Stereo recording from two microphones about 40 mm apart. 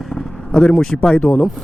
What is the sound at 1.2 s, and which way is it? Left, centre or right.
Speech, left.